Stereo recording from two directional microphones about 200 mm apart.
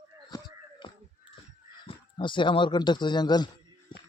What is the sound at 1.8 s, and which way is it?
Speech, 25° left (ahead or behind).